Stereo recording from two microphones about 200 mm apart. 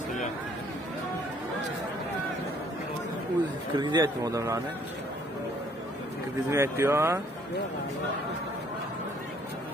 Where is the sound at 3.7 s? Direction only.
20° right (ahead or behind).